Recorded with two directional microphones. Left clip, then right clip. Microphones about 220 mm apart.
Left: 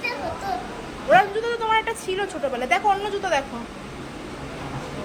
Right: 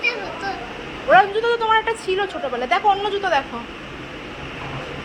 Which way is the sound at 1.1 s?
10° left (ahead or behind).